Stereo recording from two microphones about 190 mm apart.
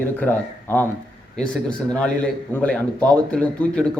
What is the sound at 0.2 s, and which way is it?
Speech, 10° left (ahead or behind).